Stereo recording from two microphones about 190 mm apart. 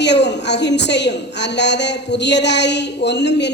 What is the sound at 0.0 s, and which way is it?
A woman's voice, 65° left (ahead or behind).